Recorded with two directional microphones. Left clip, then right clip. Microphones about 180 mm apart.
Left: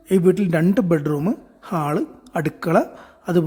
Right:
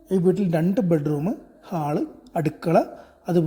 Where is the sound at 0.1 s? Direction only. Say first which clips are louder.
Left 4 dB; 25° left (ahead or behind).